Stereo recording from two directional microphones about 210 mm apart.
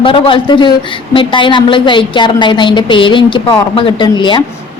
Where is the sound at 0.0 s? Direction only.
25° left (ahead or behind).